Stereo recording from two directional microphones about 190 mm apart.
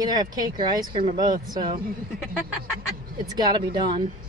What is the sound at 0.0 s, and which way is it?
Speech, 20° right (ahead or behind).